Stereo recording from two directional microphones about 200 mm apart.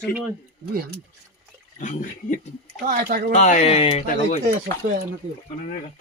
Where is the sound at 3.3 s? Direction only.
35° left (ahead or behind).